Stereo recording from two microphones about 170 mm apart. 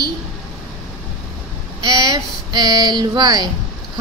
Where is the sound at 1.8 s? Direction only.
25° right (ahead or behind).